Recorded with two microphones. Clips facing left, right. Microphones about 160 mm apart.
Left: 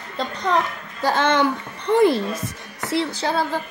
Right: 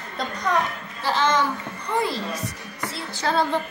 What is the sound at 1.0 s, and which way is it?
Speech, 50° left (ahead or behind).